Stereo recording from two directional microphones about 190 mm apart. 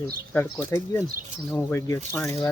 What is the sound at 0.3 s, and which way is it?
Speech, 10° left (ahead or behind).